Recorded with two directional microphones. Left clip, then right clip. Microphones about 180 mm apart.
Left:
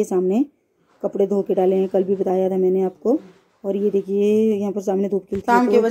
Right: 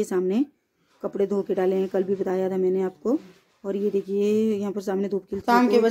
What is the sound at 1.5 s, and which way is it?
Speech, 15° left (ahead or behind).